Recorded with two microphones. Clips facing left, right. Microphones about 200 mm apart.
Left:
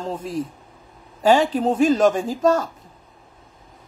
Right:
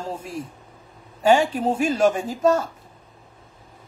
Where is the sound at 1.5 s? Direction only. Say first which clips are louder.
Left 4 dB; 10° right (ahead or behind).